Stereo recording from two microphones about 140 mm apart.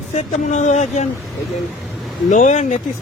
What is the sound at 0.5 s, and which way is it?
Speech, 55° left (ahead or behind).